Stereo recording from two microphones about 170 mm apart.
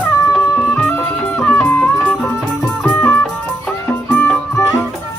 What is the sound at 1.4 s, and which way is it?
Music, 10° left (ahead or behind).